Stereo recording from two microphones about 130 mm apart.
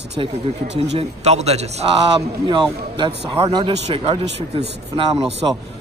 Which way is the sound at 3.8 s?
50° right (ahead or behind).